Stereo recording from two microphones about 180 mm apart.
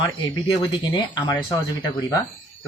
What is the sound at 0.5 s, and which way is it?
Speech, 25° left (ahead or behind).